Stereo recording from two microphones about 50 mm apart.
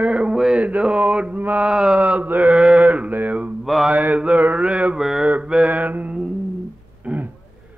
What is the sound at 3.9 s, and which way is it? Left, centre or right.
Mantra, right.